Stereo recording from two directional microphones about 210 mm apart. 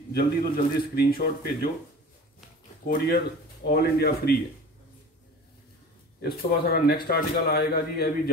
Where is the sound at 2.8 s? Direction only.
45° left (ahead or behind).